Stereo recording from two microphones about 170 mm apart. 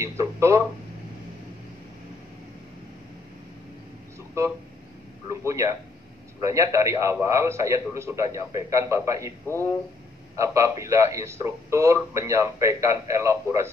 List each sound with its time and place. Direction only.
0.0 s speech: 15° right (ahead or behind)
5.3 s speech: 15° right (ahead or behind)
10.3 s speech: 20° right (ahead or behind)